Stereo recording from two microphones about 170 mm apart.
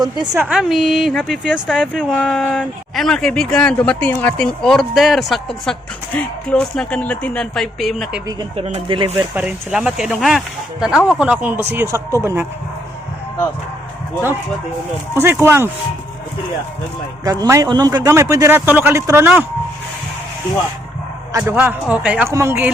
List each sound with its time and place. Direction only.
0.3 s a woman's voice: 5° right (ahead or behind)
8.5 s speech: 40° right (ahead or behind)
9.1 s a man's voice: 10° right (ahead or behind)
15.1 s a man's voice: 15° right (ahead or behind)
17.2 s a man's voice: 20° right (ahead or behind)
21.3 s a man's voice: 10° right (ahead or behind)